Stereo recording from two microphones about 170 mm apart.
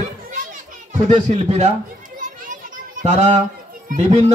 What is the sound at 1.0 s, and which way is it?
Speech, 40° right (ahead or behind).